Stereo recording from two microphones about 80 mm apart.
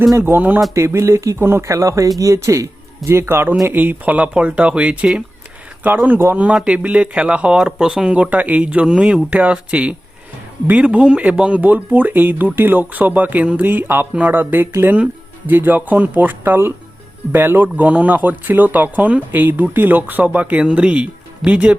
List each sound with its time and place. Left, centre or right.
0.2 s speech: right
0.7 s speech: right
6.4 s speech: centre